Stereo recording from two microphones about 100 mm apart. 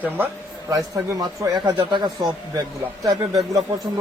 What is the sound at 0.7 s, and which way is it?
Speech, 40° right (ahead or behind).